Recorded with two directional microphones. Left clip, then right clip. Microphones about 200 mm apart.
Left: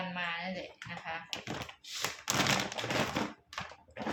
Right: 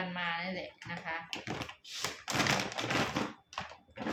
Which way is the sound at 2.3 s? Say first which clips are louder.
Left 1 dB; 15° left (ahead or behind).